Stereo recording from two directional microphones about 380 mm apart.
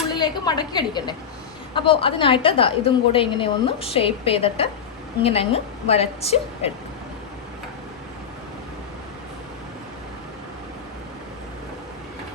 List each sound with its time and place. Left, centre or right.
0.1 s a woman's voice: centre